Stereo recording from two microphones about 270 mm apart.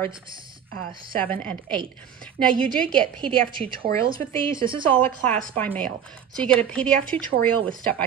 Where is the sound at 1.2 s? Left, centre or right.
Centre.